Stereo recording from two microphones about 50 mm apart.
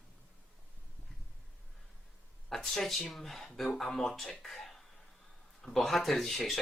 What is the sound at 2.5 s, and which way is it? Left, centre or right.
Speech, centre.